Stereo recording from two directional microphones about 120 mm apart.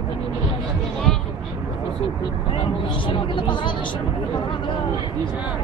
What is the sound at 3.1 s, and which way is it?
Speech, 40° left (ahead or behind).